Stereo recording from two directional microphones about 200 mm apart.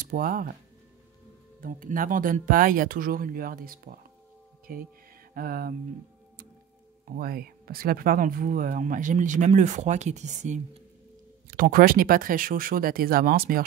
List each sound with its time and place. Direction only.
0.0 s speech: 45° right (ahead or behind)
1.6 s speech: 45° right (ahead or behind)
5.3 s music: 45° right (ahead or behind)
7.2 s speech: 50° right (ahead or behind)